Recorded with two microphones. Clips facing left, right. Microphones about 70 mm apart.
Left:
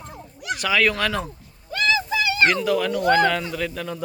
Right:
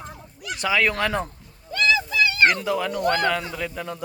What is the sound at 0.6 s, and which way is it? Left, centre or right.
Speech, centre.